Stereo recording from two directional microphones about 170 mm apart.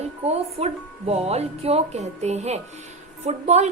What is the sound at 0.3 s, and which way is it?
A woman's voice, 40° right (ahead or behind).